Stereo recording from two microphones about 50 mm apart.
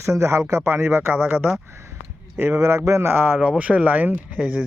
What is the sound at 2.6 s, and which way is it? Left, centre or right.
Speech, right.